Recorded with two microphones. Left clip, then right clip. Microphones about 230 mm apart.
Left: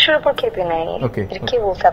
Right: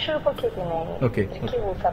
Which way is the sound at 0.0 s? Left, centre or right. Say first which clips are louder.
Left 10 dB; left.